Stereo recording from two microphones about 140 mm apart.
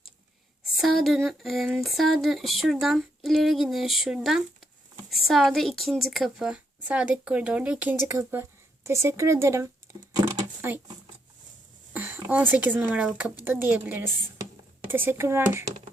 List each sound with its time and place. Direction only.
0.8 s a woman's voice: centre (ahead or behind); by 9.6 s 20° right (ahead or behind)
11.9 s a woman's voice: 10° right (ahead or behind)